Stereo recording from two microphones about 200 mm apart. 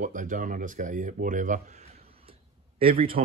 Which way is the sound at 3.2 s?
40° right (ahead or behind).